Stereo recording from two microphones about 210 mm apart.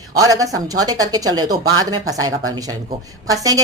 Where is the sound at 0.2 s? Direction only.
15° right (ahead or behind).